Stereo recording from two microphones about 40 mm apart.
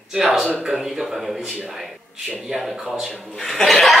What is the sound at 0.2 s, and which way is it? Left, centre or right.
Speech, right.